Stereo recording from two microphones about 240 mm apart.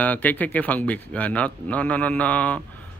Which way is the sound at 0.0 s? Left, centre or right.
Centre.